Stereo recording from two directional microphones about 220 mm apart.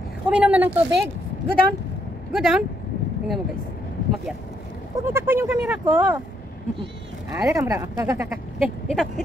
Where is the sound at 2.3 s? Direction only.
Centre (ahead or behind).